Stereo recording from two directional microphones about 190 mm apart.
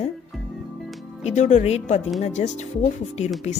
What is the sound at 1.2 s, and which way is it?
Speech, 40° left (ahead or behind).